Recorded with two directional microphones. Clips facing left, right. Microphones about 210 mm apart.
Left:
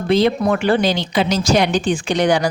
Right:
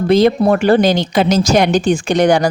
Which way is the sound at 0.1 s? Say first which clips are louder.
Right 4 dB; 45° right (ahead or behind).